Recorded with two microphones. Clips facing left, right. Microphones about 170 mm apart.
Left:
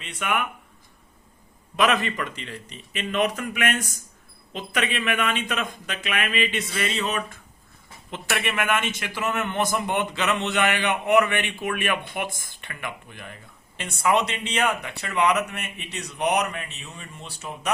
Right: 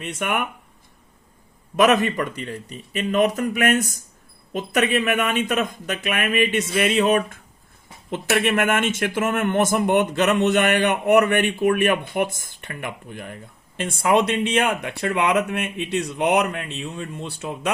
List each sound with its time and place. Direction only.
0.0 s speech: 45° right (ahead or behind)
1.7 s speech: 45° right (ahead or behind)